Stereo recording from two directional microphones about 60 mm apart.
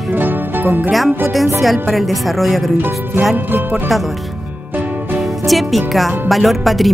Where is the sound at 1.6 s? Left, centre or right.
Centre.